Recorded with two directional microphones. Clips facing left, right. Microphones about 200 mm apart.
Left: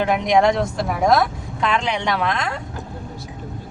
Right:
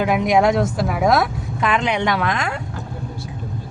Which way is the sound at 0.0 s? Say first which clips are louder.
Right 1 dB; 5° right (ahead or behind).